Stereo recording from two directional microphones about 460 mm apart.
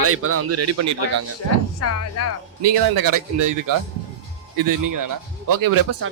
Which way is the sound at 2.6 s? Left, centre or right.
Right.